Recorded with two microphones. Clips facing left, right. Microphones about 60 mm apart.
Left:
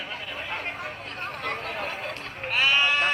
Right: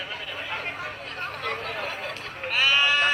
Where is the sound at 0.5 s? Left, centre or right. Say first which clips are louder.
Right 1 dB; left.